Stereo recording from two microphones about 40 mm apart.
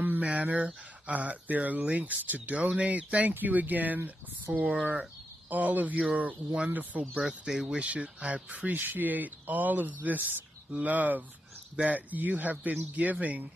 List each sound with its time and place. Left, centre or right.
0.2 s speech: right
3.3 s speech: right
7.2 s speech: centre
7.7 s speech: right